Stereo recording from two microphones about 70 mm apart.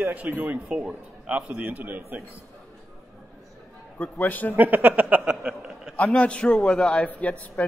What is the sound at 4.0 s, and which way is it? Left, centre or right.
Speech, left.